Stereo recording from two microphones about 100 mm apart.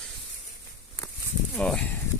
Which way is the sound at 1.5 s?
5° left (ahead or behind).